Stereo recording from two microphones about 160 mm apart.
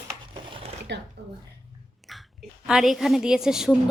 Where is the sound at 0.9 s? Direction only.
90° right.